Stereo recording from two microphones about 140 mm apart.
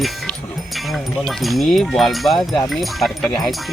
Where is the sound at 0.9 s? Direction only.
Centre (ahead or behind).